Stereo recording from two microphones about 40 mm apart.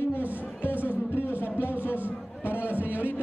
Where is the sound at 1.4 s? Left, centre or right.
Left.